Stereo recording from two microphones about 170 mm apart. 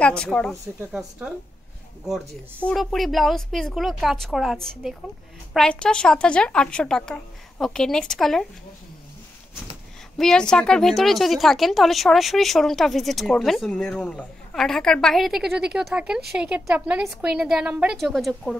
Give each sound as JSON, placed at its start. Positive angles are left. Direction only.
{"t": 0.0, "sound": "a woman's voice", "side_deg": 5}
{"t": 10.1, "sound": "a woman's voice", "side_deg": 5}